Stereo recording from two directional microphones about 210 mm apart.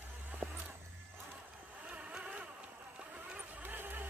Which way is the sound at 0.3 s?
5° right (ahead or behind).